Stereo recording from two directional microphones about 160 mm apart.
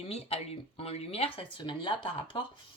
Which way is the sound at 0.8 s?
40° left (ahead or behind).